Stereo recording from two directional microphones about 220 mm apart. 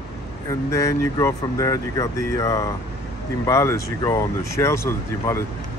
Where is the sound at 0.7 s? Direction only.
15° left (ahead or behind).